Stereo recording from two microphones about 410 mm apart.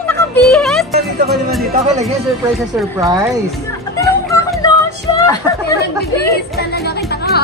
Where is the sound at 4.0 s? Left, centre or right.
Centre.